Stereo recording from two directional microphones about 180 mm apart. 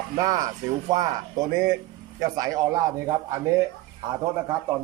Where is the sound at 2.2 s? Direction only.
20° right (ahead or behind).